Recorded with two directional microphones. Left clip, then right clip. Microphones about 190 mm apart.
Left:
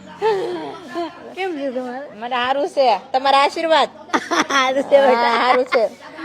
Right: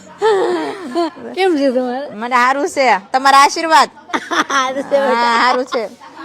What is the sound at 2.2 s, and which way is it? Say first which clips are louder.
A woman's voice: right 6 dB; 90° right.